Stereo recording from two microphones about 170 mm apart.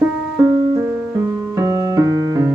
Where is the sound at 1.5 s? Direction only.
20° right (ahead or behind).